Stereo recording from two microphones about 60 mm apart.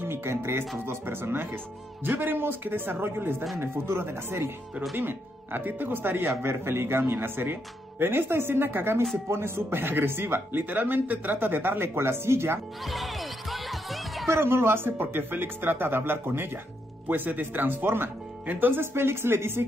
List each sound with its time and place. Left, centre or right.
0.0 s speech: right
12.8 s music: centre
14.2 s speech: right